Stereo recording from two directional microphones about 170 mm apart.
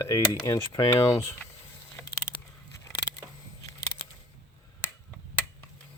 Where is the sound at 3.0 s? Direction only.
90° left.